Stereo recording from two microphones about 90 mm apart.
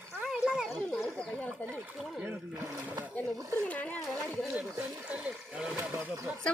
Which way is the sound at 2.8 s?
20° right (ahead or behind).